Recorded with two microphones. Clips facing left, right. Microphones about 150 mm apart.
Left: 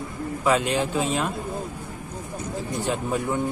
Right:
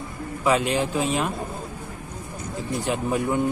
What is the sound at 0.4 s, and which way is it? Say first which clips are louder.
Speech: right 1 dB; 5° right (ahead or behind).